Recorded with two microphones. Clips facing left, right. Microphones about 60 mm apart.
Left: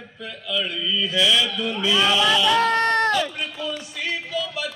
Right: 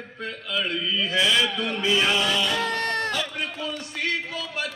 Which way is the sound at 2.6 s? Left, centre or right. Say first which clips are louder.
Left 7 dB; left.